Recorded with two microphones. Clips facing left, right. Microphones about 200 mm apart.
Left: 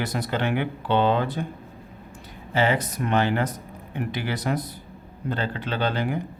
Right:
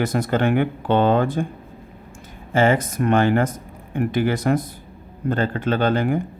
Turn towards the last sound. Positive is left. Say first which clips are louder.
# right 6 dB
turn(degrees=-50)  # may be behind; listen again after turning